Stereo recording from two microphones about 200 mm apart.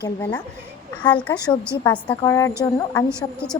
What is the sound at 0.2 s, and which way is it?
Speech, 10° left (ahead or behind).